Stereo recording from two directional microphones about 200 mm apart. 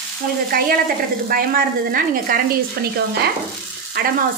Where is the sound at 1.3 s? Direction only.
45° right (ahead or behind).